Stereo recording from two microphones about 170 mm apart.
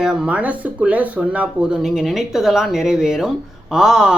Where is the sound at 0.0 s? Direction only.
5° right (ahead or behind).